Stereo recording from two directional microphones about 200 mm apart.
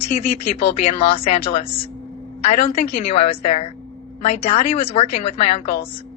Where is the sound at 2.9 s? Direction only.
30° left (ahead or behind).